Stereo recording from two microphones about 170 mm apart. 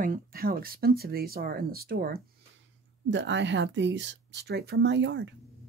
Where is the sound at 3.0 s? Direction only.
90° right.